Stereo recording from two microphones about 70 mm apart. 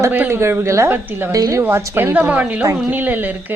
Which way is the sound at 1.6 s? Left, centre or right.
Right.